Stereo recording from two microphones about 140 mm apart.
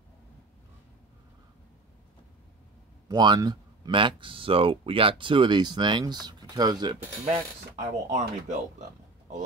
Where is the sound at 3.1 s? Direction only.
30° right (ahead or behind).